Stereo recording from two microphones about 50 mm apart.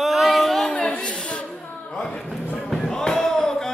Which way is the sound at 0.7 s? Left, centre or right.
Centre.